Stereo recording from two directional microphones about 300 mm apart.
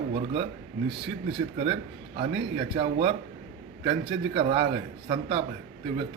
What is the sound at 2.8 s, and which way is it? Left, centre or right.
A man's voice, centre.